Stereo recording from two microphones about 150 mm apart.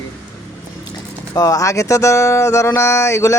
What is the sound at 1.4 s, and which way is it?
Speech, 25° left (ahead or behind).